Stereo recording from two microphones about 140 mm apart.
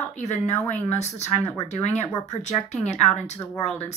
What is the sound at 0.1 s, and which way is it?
A woman's voice, 55° left (ahead or behind).